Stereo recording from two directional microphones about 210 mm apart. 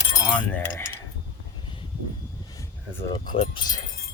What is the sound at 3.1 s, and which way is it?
Speech, 20° left (ahead or behind).